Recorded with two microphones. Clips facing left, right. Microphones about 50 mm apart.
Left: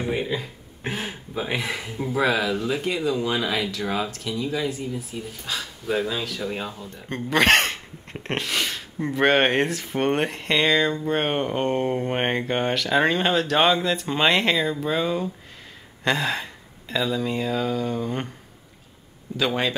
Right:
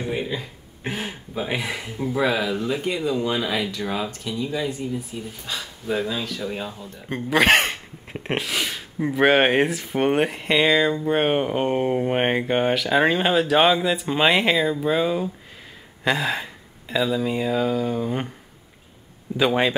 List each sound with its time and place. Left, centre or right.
0.0 s speech: centre
19.3 s speech: centre